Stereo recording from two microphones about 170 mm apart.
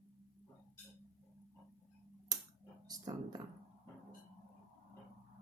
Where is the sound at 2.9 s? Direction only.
25° right (ahead or behind).